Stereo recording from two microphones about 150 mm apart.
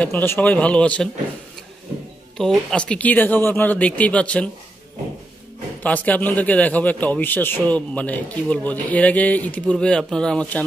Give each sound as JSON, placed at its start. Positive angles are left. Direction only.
{"t": 0.0, "sound": "a man's voice", "side_deg": 15}
{"t": 2.3, "sound": "a man's voice", "side_deg": 5}
{"t": 5.8, "sound": "a man's voice", "side_deg": 10}